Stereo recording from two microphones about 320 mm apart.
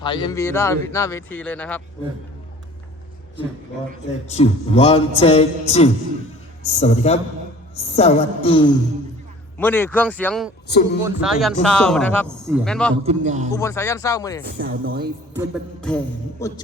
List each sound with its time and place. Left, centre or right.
0.0 s speech: centre
4.3 s music: centre
9.6 s speech: centre
13.1 s speech: right
13.5 s speech: centre
14.4 s speech: right
15.4 s speech: centre